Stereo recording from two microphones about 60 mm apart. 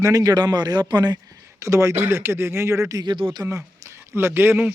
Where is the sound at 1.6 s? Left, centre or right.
Right.